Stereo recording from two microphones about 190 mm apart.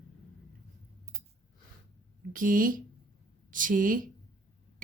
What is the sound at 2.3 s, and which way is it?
A woman's voice, 45° right (ahead or behind).